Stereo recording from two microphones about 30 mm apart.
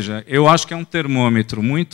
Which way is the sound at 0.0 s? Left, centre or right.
Right.